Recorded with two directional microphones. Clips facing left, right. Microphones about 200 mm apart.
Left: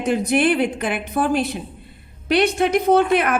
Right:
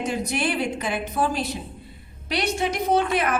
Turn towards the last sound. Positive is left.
turn(degrees=60)  # may be behind; listen again after turning